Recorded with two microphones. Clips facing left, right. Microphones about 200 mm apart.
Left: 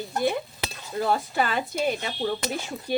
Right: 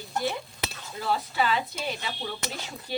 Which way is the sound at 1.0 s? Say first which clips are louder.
Left 3 dB; 50° left (ahead or behind).